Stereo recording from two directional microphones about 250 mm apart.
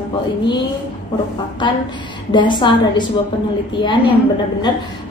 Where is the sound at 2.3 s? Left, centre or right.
Centre.